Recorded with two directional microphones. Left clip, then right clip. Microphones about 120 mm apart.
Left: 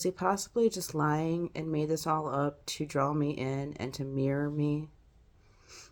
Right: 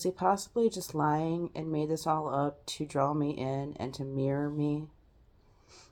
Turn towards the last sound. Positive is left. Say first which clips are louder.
# even
turn(degrees=15)  # may be behind; listen again after turning